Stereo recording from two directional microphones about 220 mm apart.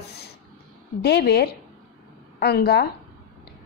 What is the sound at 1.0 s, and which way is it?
A woman's voice, 45° left (ahead or behind).